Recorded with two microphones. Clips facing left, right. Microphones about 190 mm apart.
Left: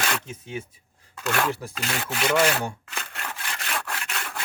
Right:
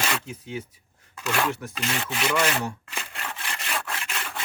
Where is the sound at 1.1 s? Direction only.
Centre (ahead or behind).